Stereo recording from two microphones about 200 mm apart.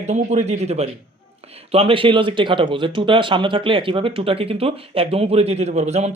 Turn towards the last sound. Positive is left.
turn(degrees=-35)  # may be behind; listen again after turning